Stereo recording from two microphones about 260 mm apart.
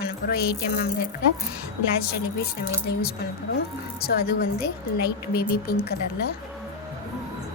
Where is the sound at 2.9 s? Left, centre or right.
Left.